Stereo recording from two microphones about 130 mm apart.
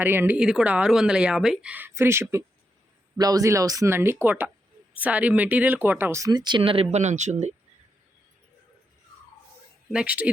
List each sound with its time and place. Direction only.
0.0 s speech: 15° right (ahead or behind); by 6.6 s 35° right (ahead or behind)
6.6 s speech: 45° right (ahead or behind)
6.9 s speech: 65° right (ahead or behind)
9.9 s speech: 10° right (ahead or behind)